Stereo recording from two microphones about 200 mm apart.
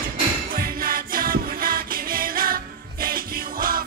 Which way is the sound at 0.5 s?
45° right (ahead or behind).